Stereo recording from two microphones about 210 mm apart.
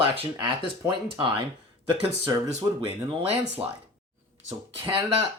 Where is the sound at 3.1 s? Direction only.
30° right (ahead or behind).